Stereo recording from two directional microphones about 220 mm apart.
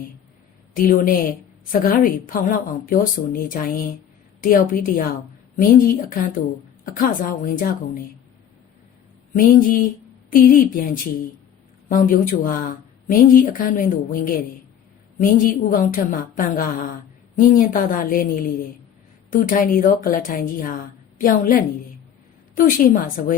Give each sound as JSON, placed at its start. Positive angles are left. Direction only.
{"t": 0.8, "sound": "speech", "side_deg": 40}
{"t": 9.3, "sound": "a woman's voice", "side_deg": 40}
{"t": 15.7, "sound": "speech", "side_deg": 40}